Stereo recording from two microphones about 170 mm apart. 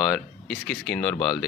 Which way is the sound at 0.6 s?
Centre (ahead or behind).